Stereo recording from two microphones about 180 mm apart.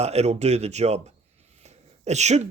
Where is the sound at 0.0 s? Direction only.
35° right (ahead or behind).